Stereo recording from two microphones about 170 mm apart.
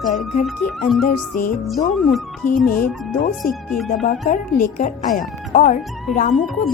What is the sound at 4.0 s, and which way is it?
Speech, 45° left (ahead or behind).